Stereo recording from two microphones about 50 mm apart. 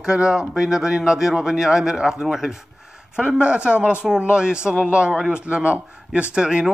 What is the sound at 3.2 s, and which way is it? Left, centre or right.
A man's voice, right.